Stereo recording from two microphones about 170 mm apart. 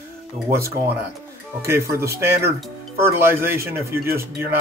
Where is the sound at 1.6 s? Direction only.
15° right (ahead or behind).